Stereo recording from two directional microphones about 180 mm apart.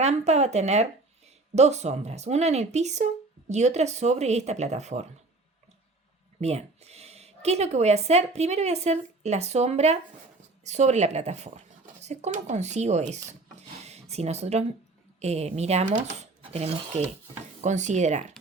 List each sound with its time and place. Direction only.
0.0 s speech: 40° right (ahead or behind)
6.4 s speech: 35° right (ahead or behind)